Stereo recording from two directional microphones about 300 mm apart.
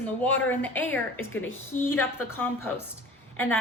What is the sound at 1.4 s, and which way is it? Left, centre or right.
Speech, left.